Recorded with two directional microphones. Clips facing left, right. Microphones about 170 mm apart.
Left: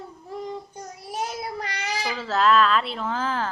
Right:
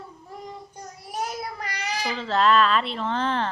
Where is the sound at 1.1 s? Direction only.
25° left (ahead or behind).